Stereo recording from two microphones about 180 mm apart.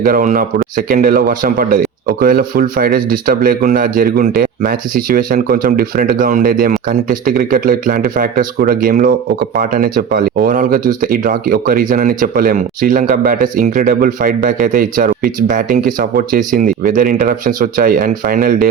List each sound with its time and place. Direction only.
0.0 s a man's voice: 50° right (ahead or behind)